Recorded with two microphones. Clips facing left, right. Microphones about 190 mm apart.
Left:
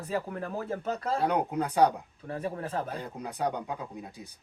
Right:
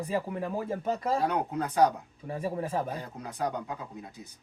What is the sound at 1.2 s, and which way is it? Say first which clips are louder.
Speech: left 2 dB; 15° left (ahead or behind).